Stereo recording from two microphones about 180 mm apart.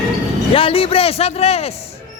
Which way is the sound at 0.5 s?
30° left (ahead or behind).